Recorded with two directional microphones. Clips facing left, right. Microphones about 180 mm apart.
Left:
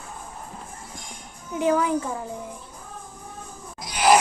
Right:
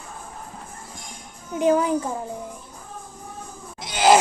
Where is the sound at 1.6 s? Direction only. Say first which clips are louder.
Right 2 dB; 25° right (ahead or behind).